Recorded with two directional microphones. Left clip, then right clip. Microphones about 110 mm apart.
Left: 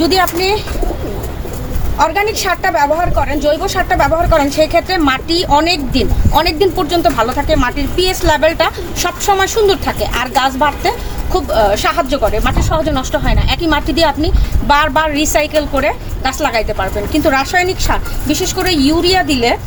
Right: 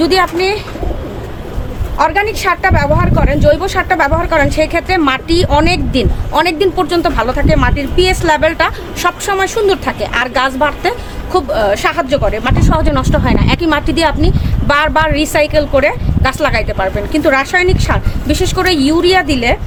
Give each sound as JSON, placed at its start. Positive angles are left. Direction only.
{"t": 0.0, "sound": "speech", "side_deg": -40}
{"t": 2.0, "sound": "speech", "side_deg": -40}
{"t": 4.9, "sound": "speech", "side_deg": -55}
{"t": 18.6, "sound": "speech", "side_deg": -35}